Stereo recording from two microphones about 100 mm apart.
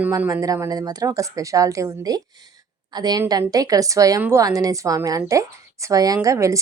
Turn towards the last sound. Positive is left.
turn(degrees=-30)  # may be behind; listen again after turning